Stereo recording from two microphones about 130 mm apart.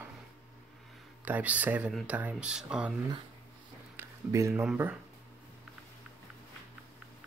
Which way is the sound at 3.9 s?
20° right (ahead or behind).